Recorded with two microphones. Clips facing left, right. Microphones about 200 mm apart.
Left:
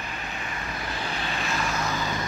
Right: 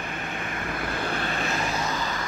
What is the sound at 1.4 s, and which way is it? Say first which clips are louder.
Vehicle: right 1 dB; 35° right (ahead or behind).